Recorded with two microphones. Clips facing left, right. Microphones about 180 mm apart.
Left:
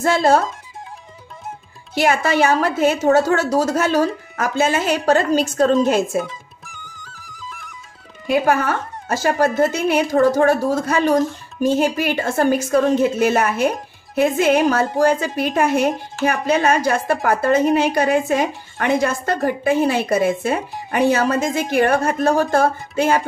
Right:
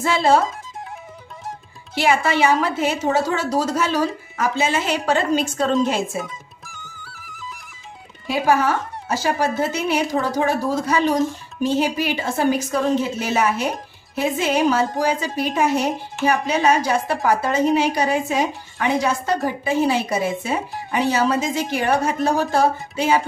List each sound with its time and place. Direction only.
0.0 s a woman's voice: 45° left (ahead or behind)
2.0 s a woman's voice: 45° left (ahead or behind)
8.3 s a woman's voice: 55° left (ahead or behind)